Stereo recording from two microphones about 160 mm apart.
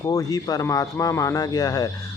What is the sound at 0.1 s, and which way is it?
Speech, 20° left (ahead or behind).